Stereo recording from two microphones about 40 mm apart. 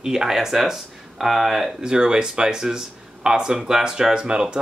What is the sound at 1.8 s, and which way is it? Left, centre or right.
A man's voice, right.